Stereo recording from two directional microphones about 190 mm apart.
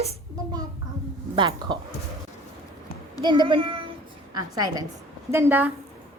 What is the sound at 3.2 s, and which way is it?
A woman's voice, 25° right (ahead or behind).